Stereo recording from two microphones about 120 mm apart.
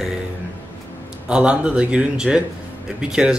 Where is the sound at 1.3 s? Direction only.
10° right (ahead or behind).